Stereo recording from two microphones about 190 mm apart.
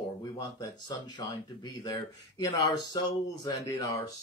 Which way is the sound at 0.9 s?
20° left (ahead or behind).